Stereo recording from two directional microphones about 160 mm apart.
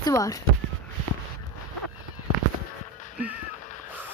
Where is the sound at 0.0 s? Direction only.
20° left (ahead or behind).